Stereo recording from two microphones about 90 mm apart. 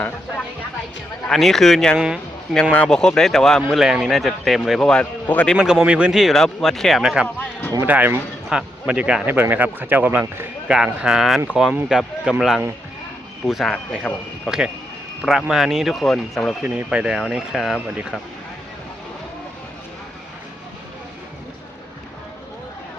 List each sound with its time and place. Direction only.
1.3 s speech: centre (ahead or behind)
2.0 s speech: 10° right (ahead or behind)
2.7 s a man's voice: 10° left (ahead or behind)
5.5 s speech: 10° right (ahead or behind)
7.8 s speech: 20° right (ahead or behind)
9.2 s speech: 20° right (ahead or behind)
10.7 s speech: 10° right (ahead or behind)
14.1 s a man's voice: 15° left (ahead or behind)
14.4 s speech: 10° right (ahead or behind)
16.6 s speech: 15° right (ahead or behind)